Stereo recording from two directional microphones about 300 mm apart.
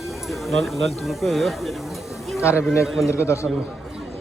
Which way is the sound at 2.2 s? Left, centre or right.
Centre.